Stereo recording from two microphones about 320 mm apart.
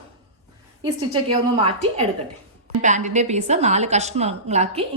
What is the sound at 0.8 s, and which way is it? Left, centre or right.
Speech, centre.